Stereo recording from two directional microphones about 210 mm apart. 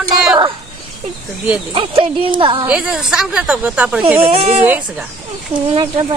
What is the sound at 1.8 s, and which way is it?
Speech, 25° right (ahead or behind).